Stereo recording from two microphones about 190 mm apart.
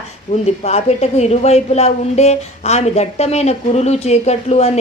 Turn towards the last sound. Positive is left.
turn(degrees=35)  # may be behind; listen again after turning